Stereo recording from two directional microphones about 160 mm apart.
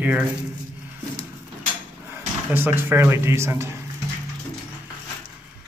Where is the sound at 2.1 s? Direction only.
15° right (ahead or behind).